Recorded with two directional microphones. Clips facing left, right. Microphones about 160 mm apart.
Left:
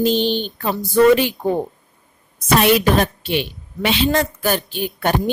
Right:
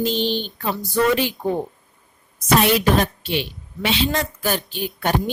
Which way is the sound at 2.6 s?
55° left (ahead or behind).